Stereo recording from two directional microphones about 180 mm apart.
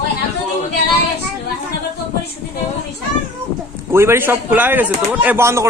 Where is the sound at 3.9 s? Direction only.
15° right (ahead or behind).